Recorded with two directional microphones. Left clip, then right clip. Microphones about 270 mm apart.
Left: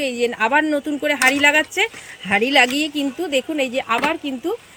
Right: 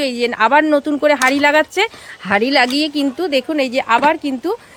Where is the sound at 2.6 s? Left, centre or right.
Right.